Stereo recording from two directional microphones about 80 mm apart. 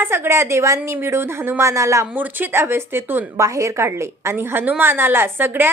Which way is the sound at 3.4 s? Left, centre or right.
Right.